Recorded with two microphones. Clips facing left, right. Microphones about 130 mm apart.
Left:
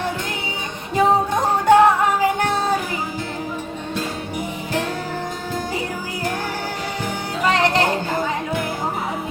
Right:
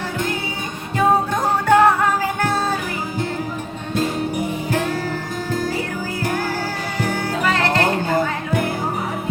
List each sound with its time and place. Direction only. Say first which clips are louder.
1.6 s music: left 1 dB; 20° left (ahead or behind)
7.4 s music: left 3 dB; 20° left (ahead or behind)